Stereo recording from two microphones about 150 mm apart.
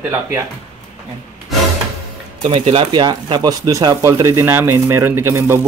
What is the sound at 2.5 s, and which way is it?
Speech, 35° right (ahead or behind).